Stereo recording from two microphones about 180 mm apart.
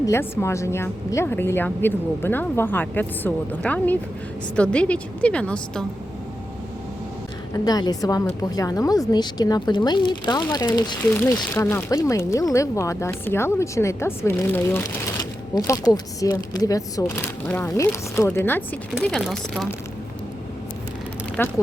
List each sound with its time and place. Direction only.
0.0 s speech: 15° left (ahead or behind)
7.5 s a woman's voice: 20° left (ahead or behind); by 19.6 s centre (ahead or behind)
21.4 s speech: 10° left (ahead or behind)